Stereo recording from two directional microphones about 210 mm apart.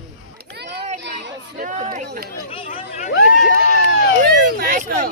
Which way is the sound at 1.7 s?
35° right (ahead or behind).